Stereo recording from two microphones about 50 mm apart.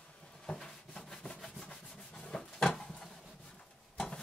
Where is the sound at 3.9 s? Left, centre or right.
Centre.